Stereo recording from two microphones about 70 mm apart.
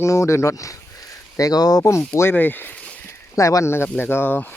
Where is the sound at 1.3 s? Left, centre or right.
Left.